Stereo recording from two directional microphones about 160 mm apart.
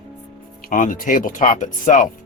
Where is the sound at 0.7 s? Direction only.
55° left (ahead or behind).